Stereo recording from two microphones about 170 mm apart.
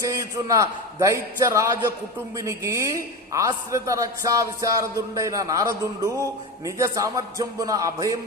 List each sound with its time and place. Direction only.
0.0 s a man's voice: 20° right (ahead or behind)